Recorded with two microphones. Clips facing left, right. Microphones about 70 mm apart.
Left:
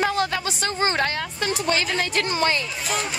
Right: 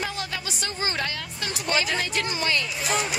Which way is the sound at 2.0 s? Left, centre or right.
Left.